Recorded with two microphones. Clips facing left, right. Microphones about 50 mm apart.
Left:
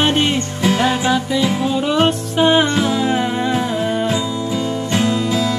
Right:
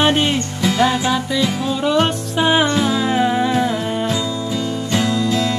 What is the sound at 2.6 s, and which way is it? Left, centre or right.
Music, left.